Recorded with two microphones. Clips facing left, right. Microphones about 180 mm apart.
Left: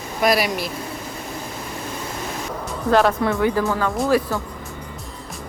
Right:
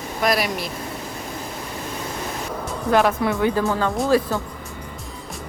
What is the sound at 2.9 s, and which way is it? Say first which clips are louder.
Speech: left 1 dB; 15° right (ahead or behind).